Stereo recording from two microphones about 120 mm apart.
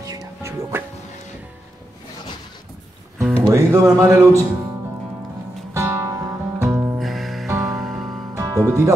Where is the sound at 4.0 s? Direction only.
25° right (ahead or behind).